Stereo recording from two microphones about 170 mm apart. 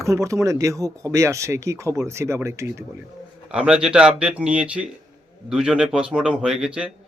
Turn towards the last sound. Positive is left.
turn(degrees=-5)  # may be behind; listen again after turning